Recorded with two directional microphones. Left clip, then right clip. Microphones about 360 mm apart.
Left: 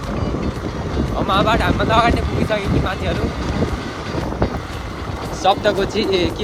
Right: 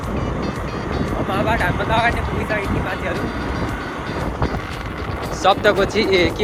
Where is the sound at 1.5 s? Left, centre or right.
Centre.